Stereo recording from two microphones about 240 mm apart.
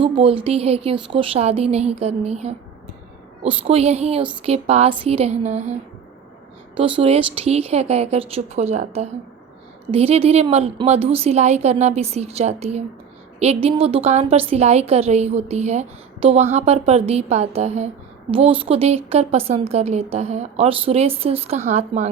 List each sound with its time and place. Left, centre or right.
0.0 s a woman's voice: right
6.7 s a woman's voice: right